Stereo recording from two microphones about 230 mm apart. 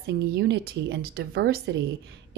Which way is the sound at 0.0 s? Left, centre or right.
Right.